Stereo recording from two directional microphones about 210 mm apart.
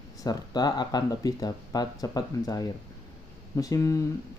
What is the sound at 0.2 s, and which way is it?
Speech, 20° left (ahead or behind).